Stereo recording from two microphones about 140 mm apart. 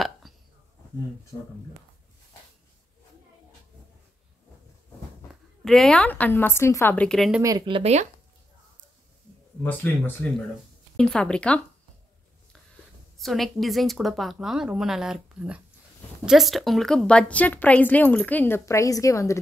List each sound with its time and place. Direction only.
0.2 s hiccup: centre (ahead or behind)
1.3 s a woman's voice: 10° left (ahead or behind)
5.3 s a woman's voice: centre (ahead or behind)
7.1 s a woman's voice: centre (ahead or behind)
7.4 s speech: 30° right (ahead or behind)
9.6 s a woman's voice: 10° left (ahead or behind)
13.2 s a woman's voice: centre (ahead or behind); by 19.3 s 20° left (ahead or behind)